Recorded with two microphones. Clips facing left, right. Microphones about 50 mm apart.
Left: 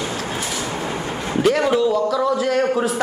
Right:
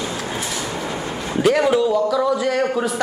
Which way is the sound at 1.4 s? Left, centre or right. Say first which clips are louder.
Right 1 dB; centre.